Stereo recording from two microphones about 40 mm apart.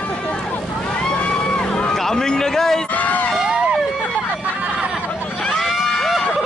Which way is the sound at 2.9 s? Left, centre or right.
Left.